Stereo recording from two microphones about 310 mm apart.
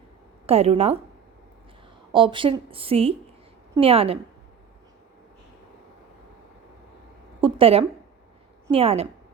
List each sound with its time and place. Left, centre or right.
0.4 s a woman's voice: centre
2.1 s speech: centre
7.4 s a sound: centre
8.6 s a woman's voice: centre